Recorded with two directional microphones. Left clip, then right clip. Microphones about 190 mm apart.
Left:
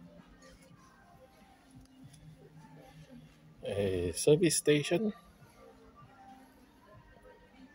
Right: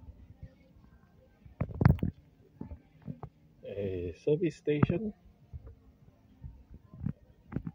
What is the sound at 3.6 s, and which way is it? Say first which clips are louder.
Speech: left 4 dB; 15° left (ahead or behind).